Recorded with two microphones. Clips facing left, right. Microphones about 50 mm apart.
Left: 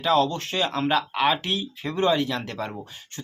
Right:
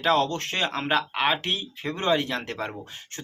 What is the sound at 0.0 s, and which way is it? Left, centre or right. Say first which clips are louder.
Speech: left 1 dB; right.